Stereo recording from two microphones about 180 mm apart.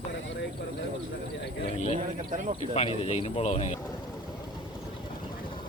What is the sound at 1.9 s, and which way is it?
Speech, 45° right (ahead or behind).